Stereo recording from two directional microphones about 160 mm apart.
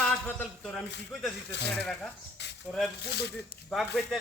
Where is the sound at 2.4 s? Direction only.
90° left.